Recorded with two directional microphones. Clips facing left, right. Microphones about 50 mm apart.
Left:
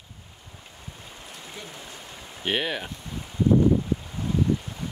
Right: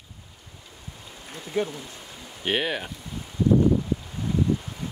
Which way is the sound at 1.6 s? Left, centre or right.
Right.